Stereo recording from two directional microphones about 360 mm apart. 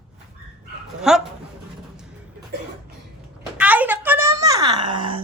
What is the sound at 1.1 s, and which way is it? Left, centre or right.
Speech, centre.